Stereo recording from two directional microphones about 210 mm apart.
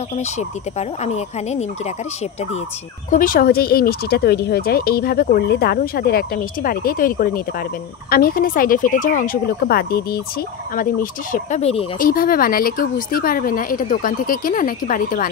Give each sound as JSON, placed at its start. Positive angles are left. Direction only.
{"t": 0.4, "sound": "speech", "side_deg": 30}
{"t": 3.1, "sound": "speech", "side_deg": 40}